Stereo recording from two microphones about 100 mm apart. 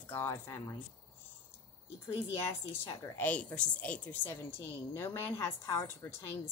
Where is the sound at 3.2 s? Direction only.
15° left (ahead or behind).